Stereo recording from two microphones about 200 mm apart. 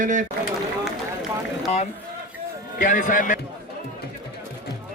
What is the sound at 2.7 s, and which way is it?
Speech, 40° left (ahead or behind).